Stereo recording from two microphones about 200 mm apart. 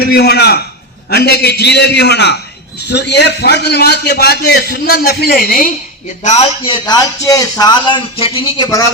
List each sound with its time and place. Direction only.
0.0 s a man's voice: 50° left (ahead or behind)
6.2 s a man's voice: 35° left (ahead or behind)
6.8 s a man's voice: 15° left (ahead or behind)